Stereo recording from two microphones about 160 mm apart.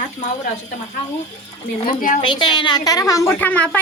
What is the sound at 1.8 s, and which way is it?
Speech, 60° left (ahead or behind).